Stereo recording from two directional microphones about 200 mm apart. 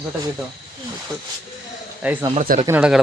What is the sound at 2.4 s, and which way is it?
Speech, 40° right (ahead or behind).